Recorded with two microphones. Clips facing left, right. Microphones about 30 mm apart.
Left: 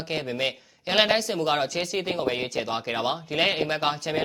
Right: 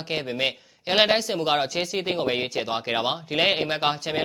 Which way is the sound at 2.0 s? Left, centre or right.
Centre.